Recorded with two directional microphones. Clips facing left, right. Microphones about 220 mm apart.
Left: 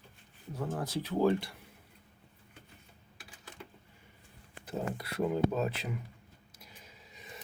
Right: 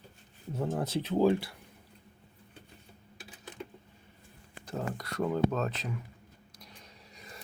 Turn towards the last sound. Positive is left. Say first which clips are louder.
# even
turn(degrees=0)  # may be behind; listen again after turning